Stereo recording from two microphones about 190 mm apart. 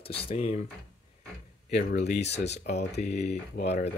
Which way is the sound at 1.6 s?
35° left (ahead or behind).